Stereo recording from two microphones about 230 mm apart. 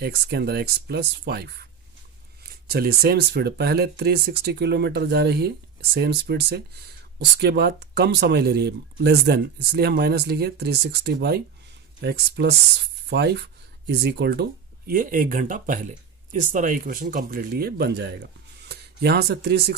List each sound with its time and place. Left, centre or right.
0.0 s speech: right